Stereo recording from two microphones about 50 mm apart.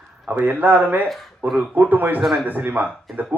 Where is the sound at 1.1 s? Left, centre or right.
Centre.